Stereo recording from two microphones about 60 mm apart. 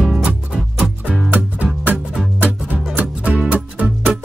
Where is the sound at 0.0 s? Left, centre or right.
Centre.